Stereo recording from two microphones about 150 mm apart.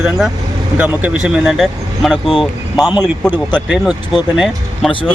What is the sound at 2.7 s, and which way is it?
Speech, 25° left (ahead or behind).